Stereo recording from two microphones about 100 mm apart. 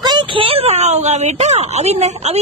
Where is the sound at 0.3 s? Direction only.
65° right (ahead or behind).